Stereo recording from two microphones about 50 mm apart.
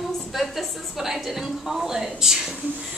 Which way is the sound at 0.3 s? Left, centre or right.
Centre.